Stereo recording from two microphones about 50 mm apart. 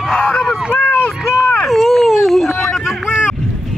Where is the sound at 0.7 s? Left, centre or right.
Left.